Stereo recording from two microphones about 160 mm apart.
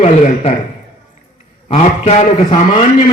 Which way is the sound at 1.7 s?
45° left (ahead or behind).